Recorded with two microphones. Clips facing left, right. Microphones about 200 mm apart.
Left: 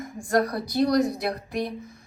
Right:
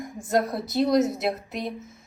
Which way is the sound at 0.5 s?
25° right (ahead or behind).